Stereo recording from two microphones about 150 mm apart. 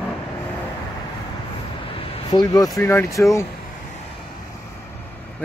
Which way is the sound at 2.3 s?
25° left (ahead or behind).